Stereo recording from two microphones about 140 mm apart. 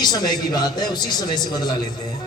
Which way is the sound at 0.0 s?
30° left (ahead or behind).